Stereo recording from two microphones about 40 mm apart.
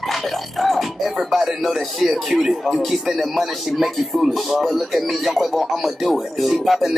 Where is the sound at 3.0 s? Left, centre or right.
Centre.